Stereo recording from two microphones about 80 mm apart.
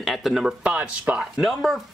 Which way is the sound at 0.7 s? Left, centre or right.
Centre.